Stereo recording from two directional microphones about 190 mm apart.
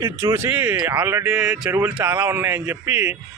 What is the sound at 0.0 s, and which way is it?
A man's voice, 15° right (ahead or behind).